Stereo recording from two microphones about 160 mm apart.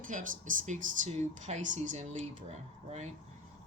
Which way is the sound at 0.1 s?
55° right (ahead or behind).